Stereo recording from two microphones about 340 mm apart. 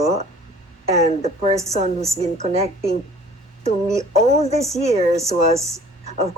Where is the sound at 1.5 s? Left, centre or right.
Centre.